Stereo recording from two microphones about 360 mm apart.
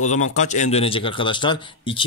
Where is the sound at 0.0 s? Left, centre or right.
Centre.